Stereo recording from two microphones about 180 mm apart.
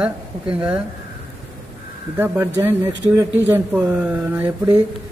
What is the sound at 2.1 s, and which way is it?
Speech, 10° right (ahead or behind).